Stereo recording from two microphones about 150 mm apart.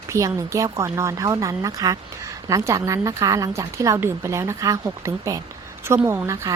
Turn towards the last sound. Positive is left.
turn(degrees=-20)  # may be behind; listen again after turning